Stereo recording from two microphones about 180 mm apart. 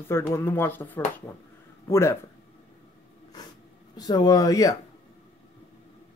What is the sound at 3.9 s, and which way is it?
Speech, 20° left (ahead or behind).